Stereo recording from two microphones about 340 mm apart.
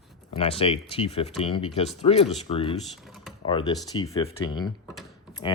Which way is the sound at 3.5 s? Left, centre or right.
Centre.